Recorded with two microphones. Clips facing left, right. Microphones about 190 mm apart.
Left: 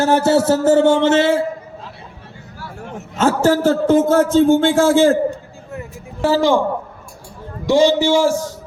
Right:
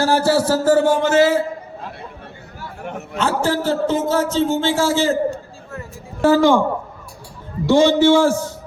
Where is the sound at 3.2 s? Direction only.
45° left (ahead or behind).